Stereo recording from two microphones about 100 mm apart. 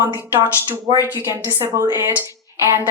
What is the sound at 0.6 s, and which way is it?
A woman's voice, 20° right (ahead or behind).